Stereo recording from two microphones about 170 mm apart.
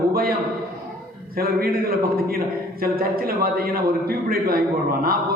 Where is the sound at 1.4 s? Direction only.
60° right (ahead or behind).